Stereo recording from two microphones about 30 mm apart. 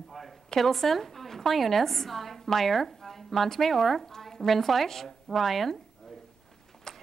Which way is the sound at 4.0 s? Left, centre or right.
Centre.